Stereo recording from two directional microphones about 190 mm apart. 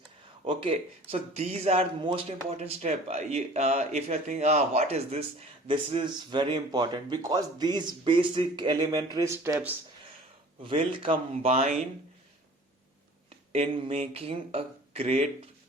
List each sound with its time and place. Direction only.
0.4 s speech: 25° right (ahead or behind); by 9.7 s 10° right (ahead or behind)
10.6 s speech: 25° right (ahead or behind)
13.5 s speech: 30° right (ahead or behind)